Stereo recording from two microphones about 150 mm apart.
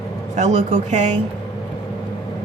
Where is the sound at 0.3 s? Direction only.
50° right (ahead or behind).